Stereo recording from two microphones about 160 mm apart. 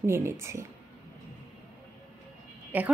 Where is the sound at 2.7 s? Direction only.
10° right (ahead or behind).